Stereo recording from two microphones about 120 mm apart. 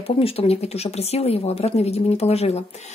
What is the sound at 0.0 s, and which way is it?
Speech, 55° left (ahead or behind).